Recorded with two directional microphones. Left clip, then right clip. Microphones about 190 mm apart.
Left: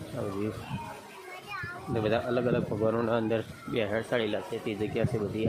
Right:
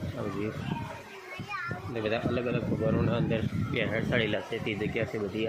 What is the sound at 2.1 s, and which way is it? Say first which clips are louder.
A man's voice: left 2 dB; 25° left (ahead or behind).